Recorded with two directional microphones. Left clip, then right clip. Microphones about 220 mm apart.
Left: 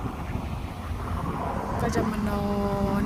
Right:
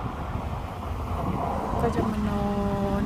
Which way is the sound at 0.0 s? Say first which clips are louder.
Right 1 dB; centre (ahead or behind).